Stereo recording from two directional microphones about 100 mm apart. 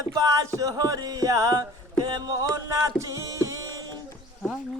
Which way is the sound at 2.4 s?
30° right (ahead or behind).